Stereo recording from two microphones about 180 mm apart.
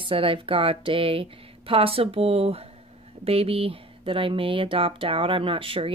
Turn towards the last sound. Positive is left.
turn(degrees=-30)  # may be behind; listen again after turning